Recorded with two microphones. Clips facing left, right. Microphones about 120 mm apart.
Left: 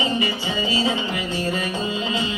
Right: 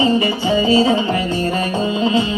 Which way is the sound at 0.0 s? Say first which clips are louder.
Right 8 dB; 35° right (ahead or behind).